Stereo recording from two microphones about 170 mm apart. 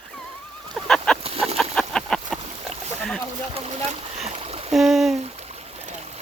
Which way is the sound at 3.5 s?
35° right (ahead or behind).